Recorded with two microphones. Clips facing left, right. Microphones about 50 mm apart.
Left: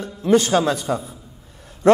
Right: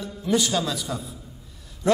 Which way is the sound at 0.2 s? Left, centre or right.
Left.